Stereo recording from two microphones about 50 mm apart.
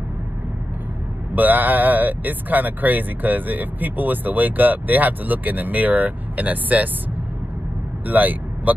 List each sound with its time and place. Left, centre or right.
1.3 s speech: right
8.1 s speech: right